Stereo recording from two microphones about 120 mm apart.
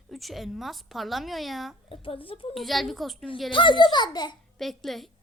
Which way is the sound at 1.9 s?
50° left (ahead or behind).